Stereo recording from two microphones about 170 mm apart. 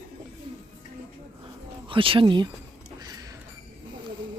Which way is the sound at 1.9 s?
30° right (ahead or behind).